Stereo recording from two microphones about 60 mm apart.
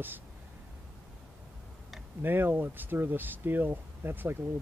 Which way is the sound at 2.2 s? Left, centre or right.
Right.